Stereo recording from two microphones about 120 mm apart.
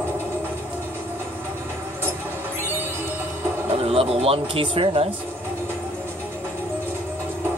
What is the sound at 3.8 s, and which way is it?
Speech, 55° right (ahead or behind).